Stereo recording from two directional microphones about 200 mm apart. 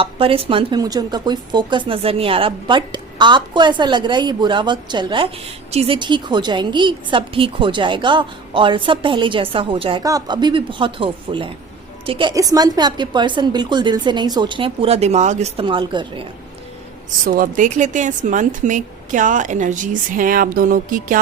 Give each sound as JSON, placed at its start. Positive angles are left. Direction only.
{"t": 0.0, "sound": "a woman's voice", "side_deg": -25}
{"t": 17.2, "sound": "speech", "side_deg": -40}